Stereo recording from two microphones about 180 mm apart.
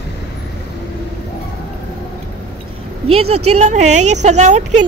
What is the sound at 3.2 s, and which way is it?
A woman's voice, 35° right (ahead or behind).